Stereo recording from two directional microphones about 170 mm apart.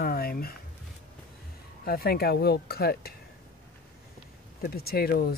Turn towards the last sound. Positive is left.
turn(degrees=65)  # may be behind; listen again after turning